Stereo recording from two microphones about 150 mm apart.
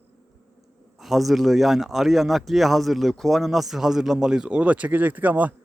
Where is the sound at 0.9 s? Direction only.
Centre (ahead or behind).